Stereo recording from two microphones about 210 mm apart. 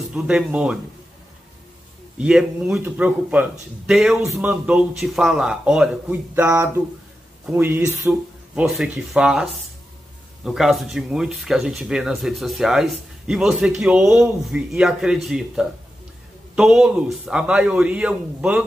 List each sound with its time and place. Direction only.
0.1 s speech: 5° right (ahead or behind)
2.1 s speech: 5° right (ahead or behind)